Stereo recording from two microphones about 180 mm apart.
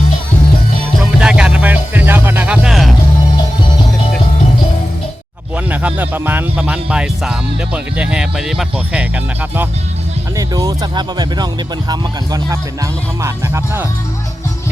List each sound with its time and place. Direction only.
1.2 s music: 5° right (ahead or behind)
5.6 s speech: 10° right (ahead or behind)
10.3 s speech: 20° right (ahead or behind)